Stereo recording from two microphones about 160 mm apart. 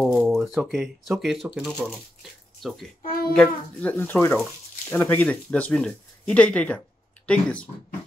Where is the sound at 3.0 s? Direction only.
65° left (ahead or behind).